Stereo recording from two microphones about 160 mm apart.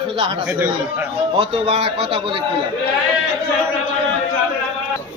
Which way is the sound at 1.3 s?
35° right (ahead or behind).